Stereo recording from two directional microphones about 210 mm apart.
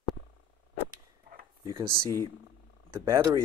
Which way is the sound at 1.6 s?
15° right (ahead or behind).